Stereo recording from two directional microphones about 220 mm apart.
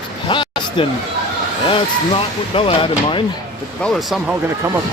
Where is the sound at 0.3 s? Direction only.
20° left (ahead or behind).